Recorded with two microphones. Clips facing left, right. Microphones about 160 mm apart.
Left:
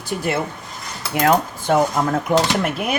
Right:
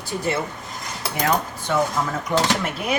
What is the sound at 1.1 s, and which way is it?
Cutlery, 55° left (ahead or behind).